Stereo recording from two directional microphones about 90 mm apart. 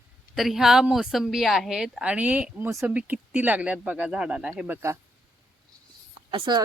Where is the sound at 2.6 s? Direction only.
30° right (ahead or behind).